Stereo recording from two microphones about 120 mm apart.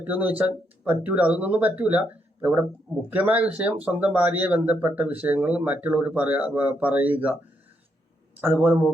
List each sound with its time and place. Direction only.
0.0 s speech: 15° right (ahead or behind)
8.4 s speech: 15° right (ahead or behind)